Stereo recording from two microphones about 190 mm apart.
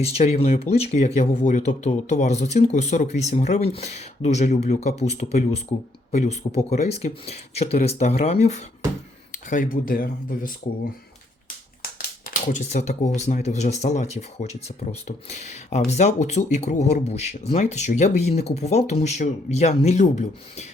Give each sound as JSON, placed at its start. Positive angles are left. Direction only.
{"t": 0.0, "sound": "speech", "side_deg": 35}
{"t": 11.8, "sound": "speech", "side_deg": 45}